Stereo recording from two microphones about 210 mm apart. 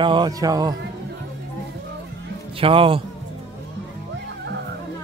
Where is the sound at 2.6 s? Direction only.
25° right (ahead or behind).